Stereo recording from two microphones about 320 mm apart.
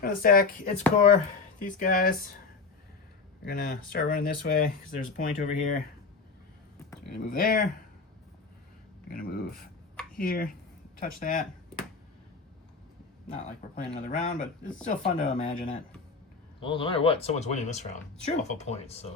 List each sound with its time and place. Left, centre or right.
0.0 s speech: left
3.4 s speech: left
7.3 s speech: left
9.0 s speech: left
13.3 s speech: left